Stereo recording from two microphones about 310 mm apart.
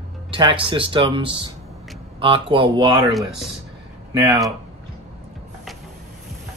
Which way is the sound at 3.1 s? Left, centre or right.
Centre.